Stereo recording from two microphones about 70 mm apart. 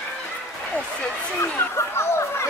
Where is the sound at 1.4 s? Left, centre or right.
Left.